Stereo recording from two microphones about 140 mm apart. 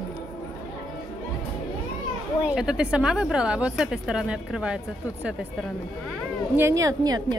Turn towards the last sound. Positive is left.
turn(degrees=-30)  # may be behind; listen again after turning